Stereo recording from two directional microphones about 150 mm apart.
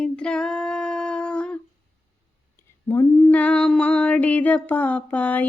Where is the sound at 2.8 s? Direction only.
15° left (ahead or behind).